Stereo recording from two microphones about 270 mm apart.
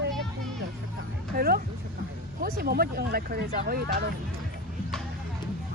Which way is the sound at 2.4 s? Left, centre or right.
Right.